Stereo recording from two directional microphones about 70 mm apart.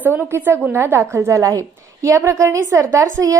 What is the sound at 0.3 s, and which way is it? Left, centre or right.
A woman's voice, right.